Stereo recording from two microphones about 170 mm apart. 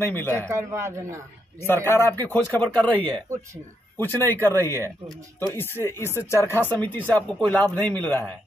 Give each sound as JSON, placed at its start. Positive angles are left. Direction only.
{"t": 0.0, "sound": "speech", "side_deg": 15}
{"t": 0.3, "sound": "a man's voice", "side_deg": -15}
{"t": 1.7, "sound": "speech", "side_deg": 15}
{"t": 4.3, "sound": "speech", "side_deg": 15}